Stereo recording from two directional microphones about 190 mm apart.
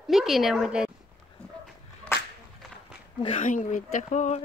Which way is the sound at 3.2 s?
35° left (ahead or behind).